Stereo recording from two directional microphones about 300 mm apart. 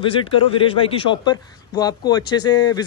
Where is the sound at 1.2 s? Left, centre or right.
Centre.